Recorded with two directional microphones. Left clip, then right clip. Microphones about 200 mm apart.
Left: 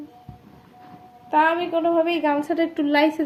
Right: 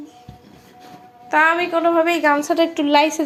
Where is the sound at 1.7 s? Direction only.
35° right (ahead or behind).